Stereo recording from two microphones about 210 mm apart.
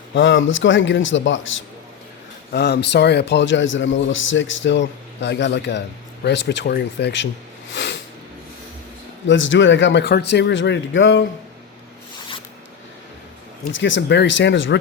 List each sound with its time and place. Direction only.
0.1 s speech: 60° left (ahead or behind)
2.5 s speech: 50° left (ahead or behind)
7.7 s snort: 60° left (ahead or behind)
9.2 s speech: 65° left (ahead or behind)
13.7 s speech: 60° left (ahead or behind)